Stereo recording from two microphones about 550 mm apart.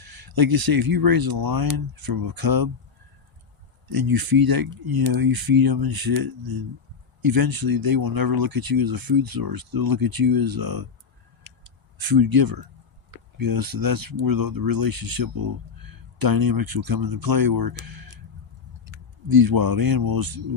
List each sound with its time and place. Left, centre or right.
0.0 s speech: right
3.8 s speech: right
11.4 s a sound: right
13.3 s speech: right